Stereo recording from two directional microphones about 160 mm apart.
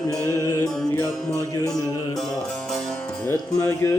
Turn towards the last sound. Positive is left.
turn(degrees=15)  # may be behind; listen again after turning